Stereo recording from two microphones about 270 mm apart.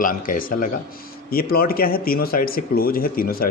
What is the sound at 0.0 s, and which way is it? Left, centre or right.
Speech, left.